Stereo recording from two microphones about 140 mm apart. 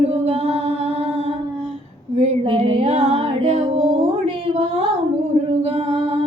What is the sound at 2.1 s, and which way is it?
Female singing, 45° right (ahead or behind).